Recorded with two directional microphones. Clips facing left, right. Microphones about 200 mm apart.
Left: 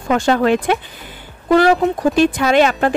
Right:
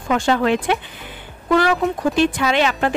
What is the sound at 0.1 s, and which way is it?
Speech, 45° left (ahead or behind).